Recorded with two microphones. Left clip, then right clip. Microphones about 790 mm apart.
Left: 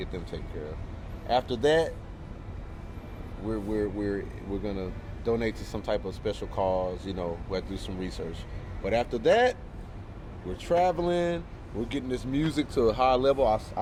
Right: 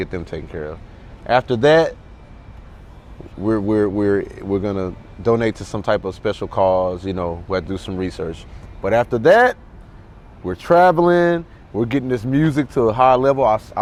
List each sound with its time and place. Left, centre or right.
0.0 s speech: right
3.4 s speech: right
10.6 s speech: right